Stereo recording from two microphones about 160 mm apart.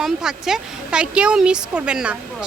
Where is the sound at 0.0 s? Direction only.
5° right (ahead or behind).